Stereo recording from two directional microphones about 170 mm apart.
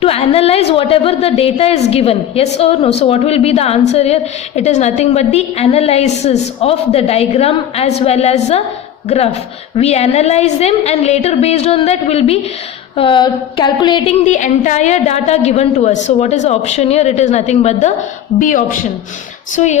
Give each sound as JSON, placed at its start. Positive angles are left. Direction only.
{"t": 0.0, "sound": "a woman's voice", "side_deg": 35}
{"t": 14.3, "sound": "a woman's voice", "side_deg": 45}